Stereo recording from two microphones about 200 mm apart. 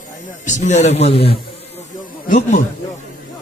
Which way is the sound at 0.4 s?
35° left (ahead or behind).